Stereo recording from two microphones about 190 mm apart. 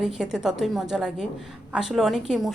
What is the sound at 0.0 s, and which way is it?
A woman's voice, centre (ahead or behind).